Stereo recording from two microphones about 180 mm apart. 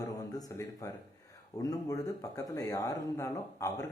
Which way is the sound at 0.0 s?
20° left (ahead or behind).